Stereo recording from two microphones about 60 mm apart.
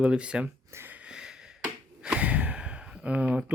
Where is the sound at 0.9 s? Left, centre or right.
Centre.